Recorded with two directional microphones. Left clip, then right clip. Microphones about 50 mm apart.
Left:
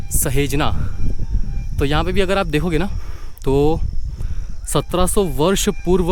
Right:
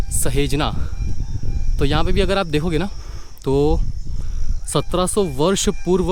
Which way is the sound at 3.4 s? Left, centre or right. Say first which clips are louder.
Left 1 dB; left.